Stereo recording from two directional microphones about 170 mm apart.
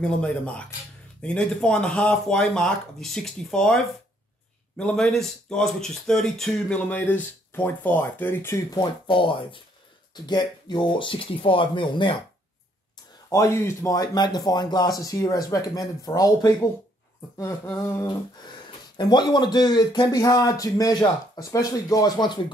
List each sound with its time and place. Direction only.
0.0 s speech: 5° left (ahead or behind)
8.7 s speech: 30° left (ahead or behind)
13.3 s speech: 15° left (ahead or behind)